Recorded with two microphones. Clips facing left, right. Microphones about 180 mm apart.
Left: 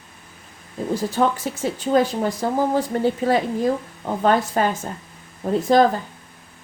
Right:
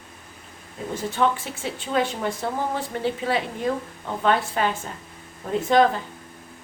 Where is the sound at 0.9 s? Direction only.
40° left (ahead or behind).